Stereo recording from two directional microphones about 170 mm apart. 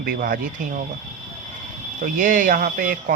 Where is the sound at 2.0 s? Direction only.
50° right (ahead or behind).